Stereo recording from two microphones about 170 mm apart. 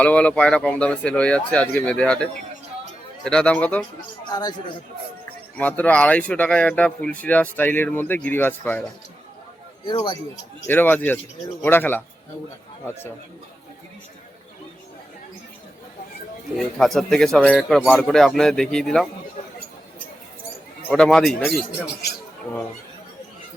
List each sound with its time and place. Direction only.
0.0 s speech: 10° left (ahead or behind)
4.3 s speech: 25° left (ahead or behind)
5.5 s speech: 10° left (ahead or behind)
9.8 s speech: 30° left (ahead or behind)
10.7 s speech: 10° left (ahead or behind)
16.6 s speech: centre (ahead or behind)
20.8 s speech: 5° left (ahead or behind)